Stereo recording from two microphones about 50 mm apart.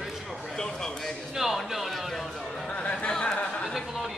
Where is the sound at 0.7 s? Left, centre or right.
Centre.